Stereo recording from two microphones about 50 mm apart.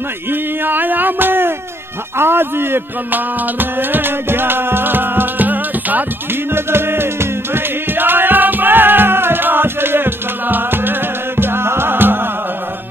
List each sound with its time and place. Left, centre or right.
0.3 s male singing: right
2.1 s music: right
6.5 s music: right